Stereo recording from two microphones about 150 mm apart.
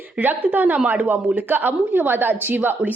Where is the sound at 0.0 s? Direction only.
10° right (ahead or behind).